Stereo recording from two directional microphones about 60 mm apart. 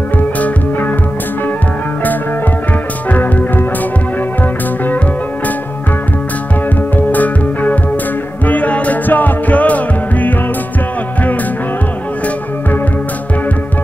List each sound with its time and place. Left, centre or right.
0.4 s music: left
3.1 s music: left
7.1 s music: left